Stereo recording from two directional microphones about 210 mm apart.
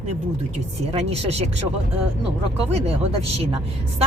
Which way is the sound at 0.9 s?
30° right (ahead or behind).